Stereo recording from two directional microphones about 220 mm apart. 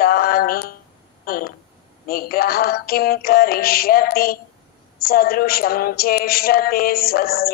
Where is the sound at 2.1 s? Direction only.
45° left (ahead or behind).